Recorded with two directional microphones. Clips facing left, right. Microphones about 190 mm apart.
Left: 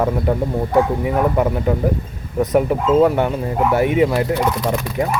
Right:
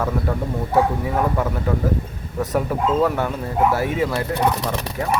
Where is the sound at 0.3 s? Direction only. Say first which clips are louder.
Left 5 dB; 20° left (ahead or behind).